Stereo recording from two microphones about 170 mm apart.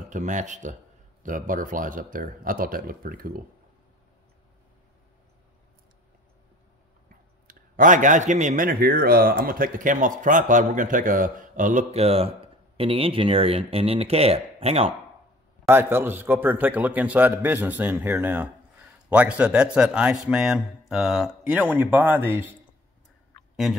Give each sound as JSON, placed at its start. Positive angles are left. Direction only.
{"t": 0.1, "sound": "speech", "side_deg": -45}
{"t": 7.1, "sound": "a sound", "side_deg": -55}
{"t": 8.6, "sound": "speech", "side_deg": -60}
{"t": 15.7, "sound": "a man's voice", "side_deg": -15}
{"t": 23.5, "sound": "speech", "side_deg": 0}